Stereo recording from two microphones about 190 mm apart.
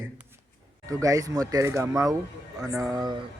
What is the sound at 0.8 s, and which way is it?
Speech, 15° right (ahead or behind).